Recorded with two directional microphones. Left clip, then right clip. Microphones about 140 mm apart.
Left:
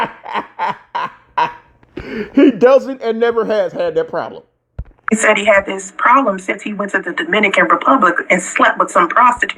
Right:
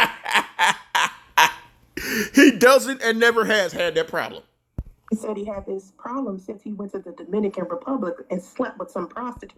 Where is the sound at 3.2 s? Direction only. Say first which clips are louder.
Left 3 dB; 40° right (ahead or behind).